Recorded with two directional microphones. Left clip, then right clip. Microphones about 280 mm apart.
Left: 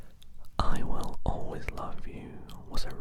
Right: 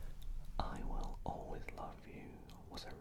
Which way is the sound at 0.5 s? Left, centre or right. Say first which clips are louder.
Left 11 dB; left.